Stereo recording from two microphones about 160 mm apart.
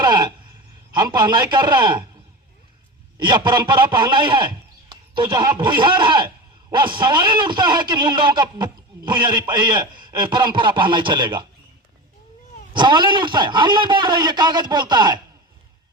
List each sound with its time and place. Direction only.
0.0 s a man's voice: 25° right (ahead or behind)
3.2 s a man's voice: 30° right (ahead or behind)
12.7 s a man's voice: 30° right (ahead or behind)